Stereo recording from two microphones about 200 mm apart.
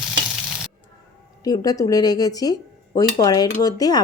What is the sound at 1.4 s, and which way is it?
Speech, 20° left (ahead or behind).